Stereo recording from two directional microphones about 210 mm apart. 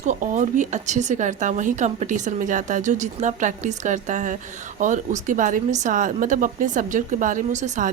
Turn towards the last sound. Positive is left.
turn(degrees=-35)  # may be behind; listen again after turning